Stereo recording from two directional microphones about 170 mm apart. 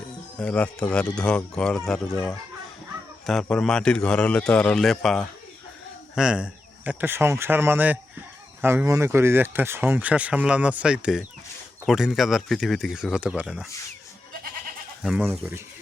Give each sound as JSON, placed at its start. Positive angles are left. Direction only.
{"t": 0.3, "sound": "a man's voice", "side_deg": 5}
{"t": 15.0, "sound": "a man's voice", "side_deg": 0}
{"t": 15.3, "sound": "speech", "side_deg": -10}